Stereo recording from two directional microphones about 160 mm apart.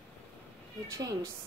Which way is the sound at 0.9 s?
20° right (ahead or behind).